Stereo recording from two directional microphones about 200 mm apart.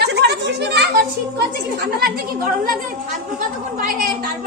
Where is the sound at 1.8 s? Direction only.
50° right (ahead or behind).